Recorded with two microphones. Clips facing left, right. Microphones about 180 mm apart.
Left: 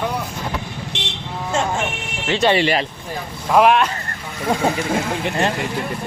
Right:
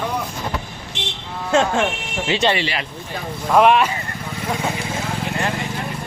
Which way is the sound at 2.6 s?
45° left (ahead or behind).